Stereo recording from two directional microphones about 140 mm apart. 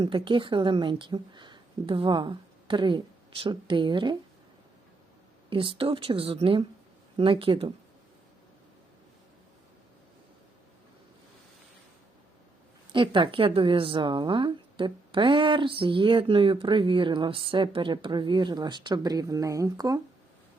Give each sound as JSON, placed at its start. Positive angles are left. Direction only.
{"t": 0.0, "sound": "speech", "side_deg": -35}
{"t": 5.5, "sound": "speech", "side_deg": -40}
{"t": 12.9, "sound": "speech", "side_deg": -35}